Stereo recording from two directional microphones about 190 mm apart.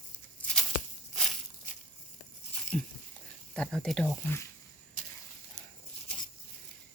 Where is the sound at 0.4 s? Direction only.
10° left (ahead or behind).